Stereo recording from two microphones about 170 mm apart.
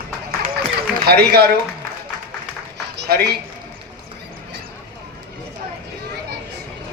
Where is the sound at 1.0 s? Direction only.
70° right (ahead or behind).